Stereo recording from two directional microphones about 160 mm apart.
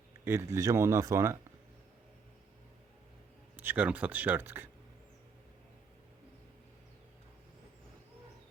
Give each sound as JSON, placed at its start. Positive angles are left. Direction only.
{"t": 0.3, "sound": "speech", "side_deg": -15}
{"t": 3.6, "sound": "speech", "side_deg": -10}